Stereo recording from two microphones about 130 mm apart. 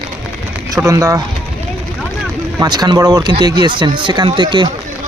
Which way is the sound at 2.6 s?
30° right (ahead or behind).